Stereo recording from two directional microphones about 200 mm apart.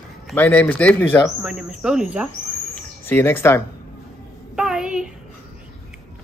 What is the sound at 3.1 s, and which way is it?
Speech, 10° left (ahead or behind).